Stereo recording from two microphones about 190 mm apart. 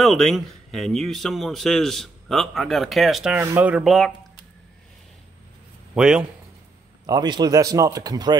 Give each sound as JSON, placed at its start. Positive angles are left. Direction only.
{"t": 0.0, "sound": "a man's voice", "side_deg": 0}
{"t": 5.9, "sound": "a man's voice", "side_deg": -5}
{"t": 7.1, "sound": "speech", "side_deg": -20}